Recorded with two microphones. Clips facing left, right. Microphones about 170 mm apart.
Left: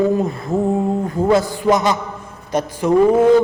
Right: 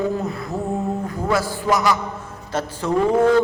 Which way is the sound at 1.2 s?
20° left (ahead or behind).